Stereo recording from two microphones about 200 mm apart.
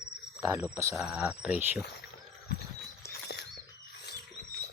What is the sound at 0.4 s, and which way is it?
Speech, 10° right (ahead or behind).